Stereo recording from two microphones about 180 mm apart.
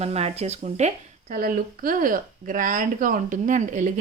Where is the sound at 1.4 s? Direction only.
55° right (ahead or behind).